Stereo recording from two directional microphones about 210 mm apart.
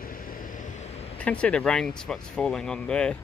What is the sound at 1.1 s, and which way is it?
Speech, 5° left (ahead or behind).